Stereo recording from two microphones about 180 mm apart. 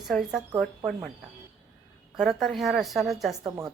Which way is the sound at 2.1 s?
Centre (ahead or behind).